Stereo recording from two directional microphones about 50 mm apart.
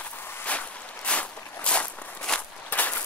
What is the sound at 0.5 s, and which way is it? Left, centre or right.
Walk, left.